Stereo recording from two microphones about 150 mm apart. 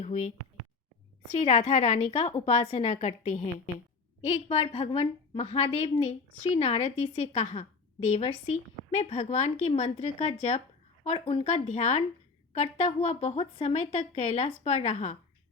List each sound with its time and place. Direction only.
0.0 s a woman's voice: 50° left (ahead or behind)